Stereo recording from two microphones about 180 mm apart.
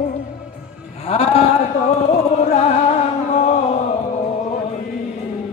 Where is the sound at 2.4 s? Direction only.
35° left (ahead or behind).